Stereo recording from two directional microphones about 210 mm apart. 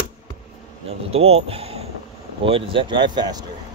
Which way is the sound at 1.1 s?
30° right (ahead or behind).